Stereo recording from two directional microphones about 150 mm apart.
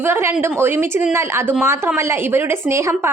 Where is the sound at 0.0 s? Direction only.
15° right (ahead or behind).